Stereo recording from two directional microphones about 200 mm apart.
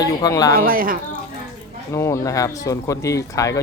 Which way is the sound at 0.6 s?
45° right (ahead or behind).